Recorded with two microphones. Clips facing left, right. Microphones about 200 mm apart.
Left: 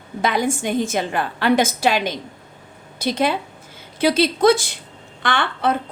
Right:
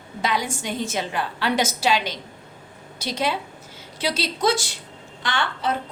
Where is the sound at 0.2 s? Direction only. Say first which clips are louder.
Left 5 dB; 50° left (ahead or behind).